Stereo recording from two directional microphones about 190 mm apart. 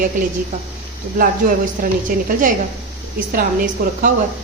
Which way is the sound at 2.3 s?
45° right (ahead or behind).